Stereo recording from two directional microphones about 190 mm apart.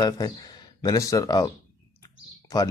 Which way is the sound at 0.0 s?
20° left (ahead or behind).